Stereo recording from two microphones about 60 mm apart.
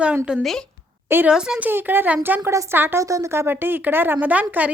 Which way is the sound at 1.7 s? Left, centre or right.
Right.